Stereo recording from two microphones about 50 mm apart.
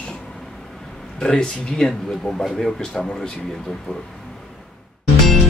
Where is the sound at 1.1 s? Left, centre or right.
Centre.